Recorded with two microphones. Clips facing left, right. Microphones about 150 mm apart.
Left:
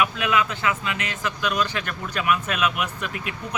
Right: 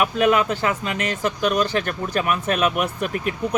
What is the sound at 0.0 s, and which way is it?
Speech, 40° right (ahead or behind).